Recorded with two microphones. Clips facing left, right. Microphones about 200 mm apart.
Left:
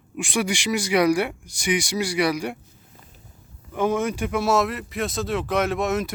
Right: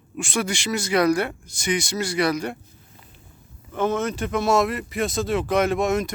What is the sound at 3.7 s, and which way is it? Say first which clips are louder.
Speech: left 1 dB; 10° left (ahead or behind).